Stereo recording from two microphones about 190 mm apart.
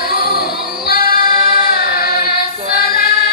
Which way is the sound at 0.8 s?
50° left (ahead or behind).